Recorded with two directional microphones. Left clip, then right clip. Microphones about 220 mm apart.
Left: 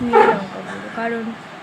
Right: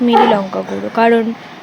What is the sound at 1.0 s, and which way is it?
Speech, 35° right (ahead or behind).